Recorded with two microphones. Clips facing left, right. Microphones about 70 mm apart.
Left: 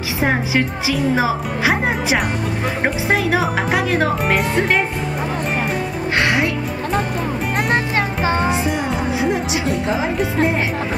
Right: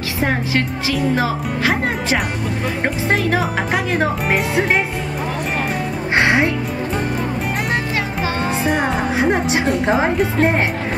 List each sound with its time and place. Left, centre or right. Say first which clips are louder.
0.2 s a woman's voice: left 1 dB; centre
6.1 s music: right 3 dB; right
8.2 s child singing: left 4 dB; left
8.6 s music: right 2 dB; right
9.8 s speech: right 3 dB; right